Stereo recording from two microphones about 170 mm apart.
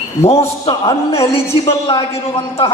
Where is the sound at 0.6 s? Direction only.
30° left (ahead or behind).